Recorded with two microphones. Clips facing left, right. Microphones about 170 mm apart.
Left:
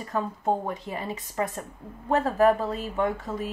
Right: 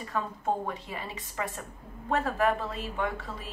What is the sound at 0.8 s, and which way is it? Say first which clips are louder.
Speech: left 6 dB; 40° left (ahead or behind).